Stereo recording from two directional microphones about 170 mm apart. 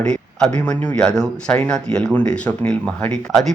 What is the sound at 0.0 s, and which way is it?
Speech, 5° left (ahead or behind).